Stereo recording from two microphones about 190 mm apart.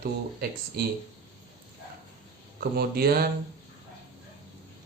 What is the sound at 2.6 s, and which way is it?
Speech, 55° right (ahead or behind).